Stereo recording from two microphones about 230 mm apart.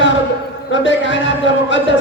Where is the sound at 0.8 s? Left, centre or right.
Left.